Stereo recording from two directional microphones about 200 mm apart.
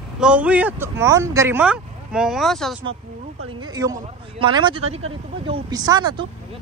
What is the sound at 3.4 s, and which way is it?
Speech, 20° right (ahead or behind).